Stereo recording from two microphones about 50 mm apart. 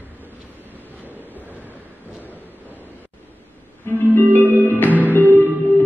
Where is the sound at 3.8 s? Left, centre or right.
Left.